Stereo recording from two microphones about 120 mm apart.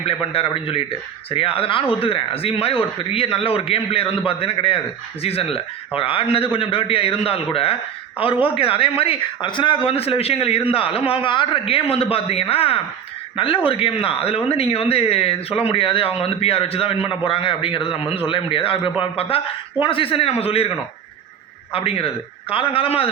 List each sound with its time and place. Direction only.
0.0 s speech: 50° left (ahead or behind)
21.7 s speech: 50° left (ahead or behind)